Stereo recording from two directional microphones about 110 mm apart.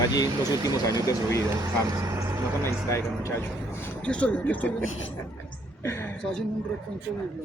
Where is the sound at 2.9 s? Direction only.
25° left (ahead or behind).